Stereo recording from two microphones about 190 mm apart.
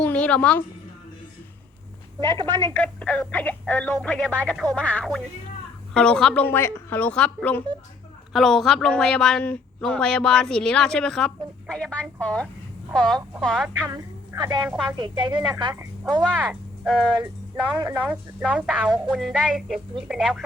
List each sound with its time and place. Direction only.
0.0 s music: 5° left (ahead or behind)
2.2 s a woman's voice: 25° right (ahead or behind)
2.6 s a woman's voice: 10° left (ahead or behind)
13.7 s a woman's voice: 15° right (ahead or behind)
16.3 s speech: 5° right (ahead or behind)
16.9 s a woman's voice: 5° left (ahead or behind)